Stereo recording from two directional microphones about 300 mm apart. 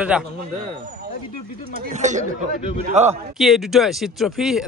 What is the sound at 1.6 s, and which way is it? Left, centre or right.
Speech, right.